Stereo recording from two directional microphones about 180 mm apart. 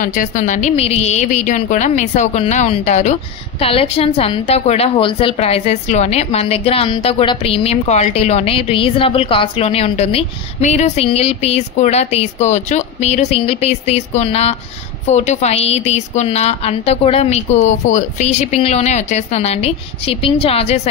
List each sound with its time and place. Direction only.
0.0 s a woman's voice: 50° left (ahead or behind)